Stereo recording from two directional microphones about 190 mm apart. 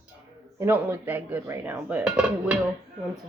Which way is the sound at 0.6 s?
10° right (ahead or behind).